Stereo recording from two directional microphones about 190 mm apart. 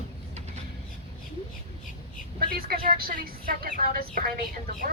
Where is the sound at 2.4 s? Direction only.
50° right (ahead or behind).